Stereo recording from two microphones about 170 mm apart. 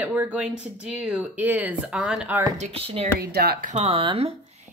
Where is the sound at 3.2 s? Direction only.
65° right (ahead or behind).